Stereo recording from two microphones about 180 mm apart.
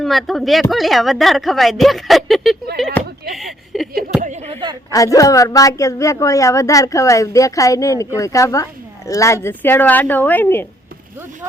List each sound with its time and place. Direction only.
0.0 s speech: centre (ahead or behind)
4.2 s speech: 40° right (ahead or behind)
4.9 s a woman's voice: 20° left (ahead or behind)